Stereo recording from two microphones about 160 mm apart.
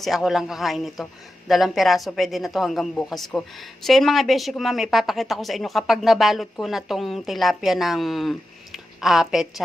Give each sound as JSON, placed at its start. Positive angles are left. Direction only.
{"t": 0.0, "sound": "a woman's voice", "side_deg": 0}